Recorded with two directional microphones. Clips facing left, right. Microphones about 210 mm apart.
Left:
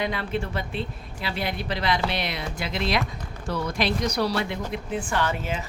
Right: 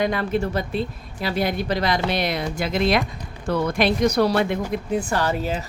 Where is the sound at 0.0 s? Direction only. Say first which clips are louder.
Right 6 dB; 45° right (ahead or behind).